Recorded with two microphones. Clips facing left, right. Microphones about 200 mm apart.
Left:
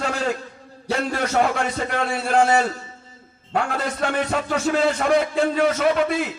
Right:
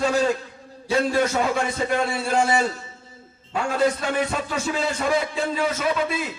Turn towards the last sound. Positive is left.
turn(degrees=65)  # may be behind; listen again after turning